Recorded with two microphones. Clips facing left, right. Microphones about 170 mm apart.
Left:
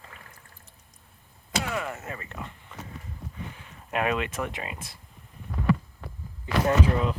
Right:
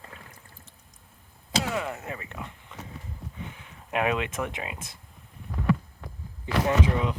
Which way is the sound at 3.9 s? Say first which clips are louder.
Right 1 dB; 15° right (ahead or behind).